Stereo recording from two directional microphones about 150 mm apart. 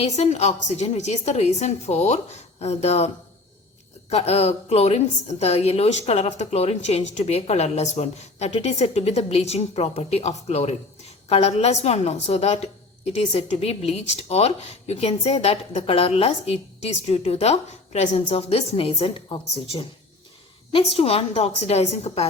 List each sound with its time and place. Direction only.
0.0 s a woman's voice: 45° left (ahead or behind)
4.1 s a woman's voice: 45° left (ahead or behind)